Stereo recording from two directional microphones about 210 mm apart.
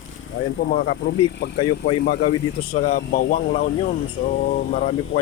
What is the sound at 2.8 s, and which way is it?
Speech, 40° left (ahead or behind).